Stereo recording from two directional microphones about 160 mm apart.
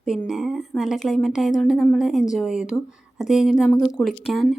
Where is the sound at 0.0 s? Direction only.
Centre (ahead or behind).